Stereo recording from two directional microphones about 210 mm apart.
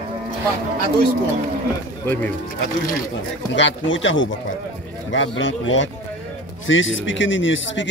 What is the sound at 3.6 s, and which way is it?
Speech, 65° left (ahead or behind).